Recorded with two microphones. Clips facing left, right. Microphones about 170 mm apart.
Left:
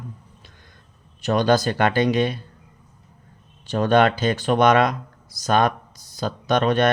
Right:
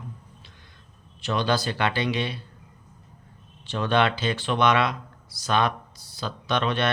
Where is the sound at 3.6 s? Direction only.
45° left (ahead or behind).